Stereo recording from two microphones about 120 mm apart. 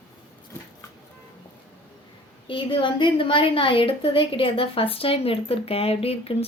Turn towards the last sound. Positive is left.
turn(degrees=55)  # may be behind; listen again after turning